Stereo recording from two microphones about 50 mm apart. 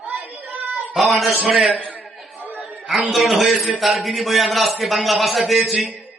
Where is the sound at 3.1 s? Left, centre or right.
Centre.